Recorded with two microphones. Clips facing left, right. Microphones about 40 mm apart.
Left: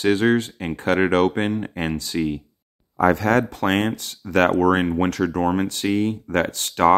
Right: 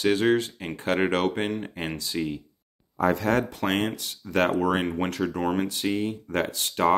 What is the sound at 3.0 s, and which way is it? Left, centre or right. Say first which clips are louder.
Speech: left 5 dB; left.